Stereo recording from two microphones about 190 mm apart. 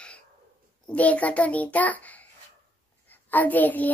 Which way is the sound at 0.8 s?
5° left (ahead or behind).